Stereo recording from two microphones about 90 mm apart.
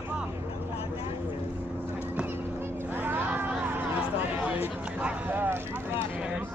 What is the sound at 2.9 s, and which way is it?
Vehicle, 20° right (ahead or behind).